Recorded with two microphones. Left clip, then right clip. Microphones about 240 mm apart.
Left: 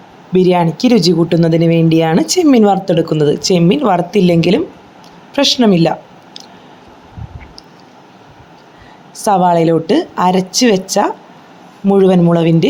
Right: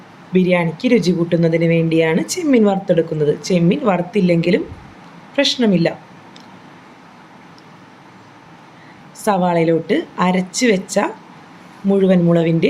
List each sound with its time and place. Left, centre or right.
0.3 s speech: left
9.1 s speech: left